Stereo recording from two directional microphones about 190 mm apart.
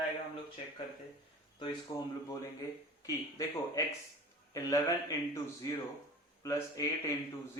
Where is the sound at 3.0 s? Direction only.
20° left (ahead or behind).